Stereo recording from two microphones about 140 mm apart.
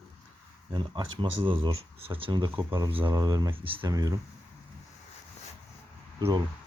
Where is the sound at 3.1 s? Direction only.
25° right (ahead or behind).